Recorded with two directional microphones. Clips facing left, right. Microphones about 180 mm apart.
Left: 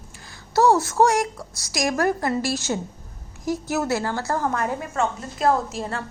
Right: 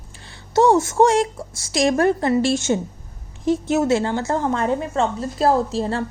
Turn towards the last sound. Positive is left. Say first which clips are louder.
# right 4 dB
turn(degrees=-30)  # may be behind; listen again after turning